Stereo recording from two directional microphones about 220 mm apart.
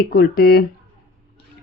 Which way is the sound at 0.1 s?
45° left (ahead or behind).